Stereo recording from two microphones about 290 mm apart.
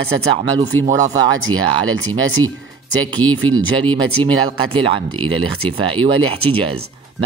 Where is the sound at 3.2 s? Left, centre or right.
Centre.